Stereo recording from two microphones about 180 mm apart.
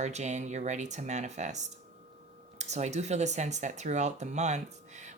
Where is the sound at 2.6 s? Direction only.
40° right (ahead or behind).